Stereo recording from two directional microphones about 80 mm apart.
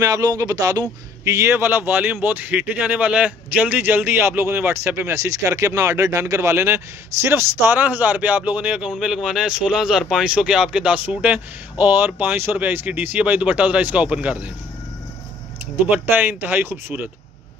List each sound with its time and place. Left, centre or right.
0.0 s a man's voice: right
1.3 s speech: right; by 14.5 s centre
15.9 s speech: right